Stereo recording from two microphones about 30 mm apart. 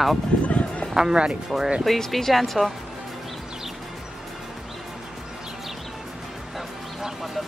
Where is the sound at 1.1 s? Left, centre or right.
Right.